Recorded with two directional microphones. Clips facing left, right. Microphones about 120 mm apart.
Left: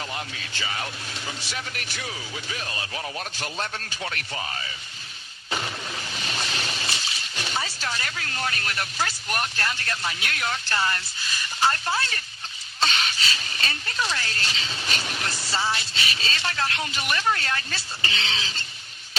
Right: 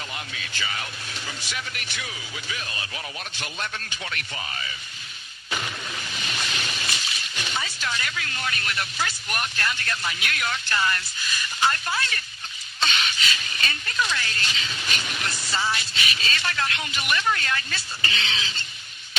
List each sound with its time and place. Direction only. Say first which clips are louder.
0.3 s speech: left 1 dB; 35° left (ahead or behind)
5.5 s a sound: left 1 dB; 30° left (ahead or behind)
6.1 s speech: left 1 dB; 35° left (ahead or behind)